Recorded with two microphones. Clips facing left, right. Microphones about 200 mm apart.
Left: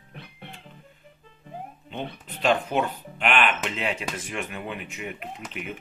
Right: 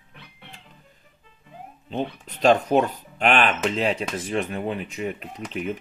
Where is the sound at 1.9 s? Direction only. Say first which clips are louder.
Right 7 dB; 40° right (ahead or behind).